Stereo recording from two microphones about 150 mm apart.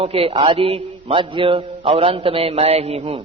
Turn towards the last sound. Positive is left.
turn(degrees=-40)  # may be behind; listen again after turning